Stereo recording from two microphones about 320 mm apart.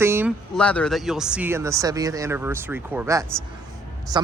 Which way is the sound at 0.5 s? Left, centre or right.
Centre.